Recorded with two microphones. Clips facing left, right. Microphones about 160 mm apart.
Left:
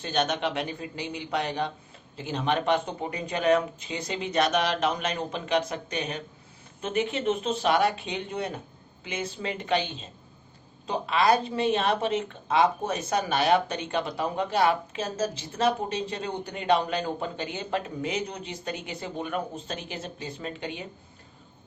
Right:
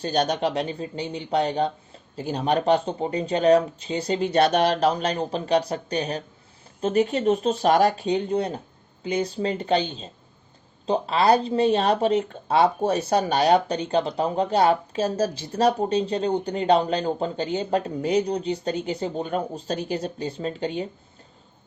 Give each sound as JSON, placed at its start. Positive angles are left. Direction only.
{"t": 0.0, "sound": "speech", "side_deg": -35}